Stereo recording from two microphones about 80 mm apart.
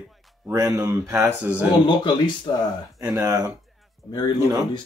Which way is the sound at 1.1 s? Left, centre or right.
Centre.